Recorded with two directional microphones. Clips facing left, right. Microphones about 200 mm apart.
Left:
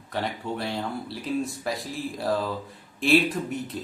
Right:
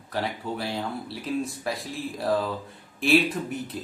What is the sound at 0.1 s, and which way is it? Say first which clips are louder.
A man's voice: even; centre (ahead or behind).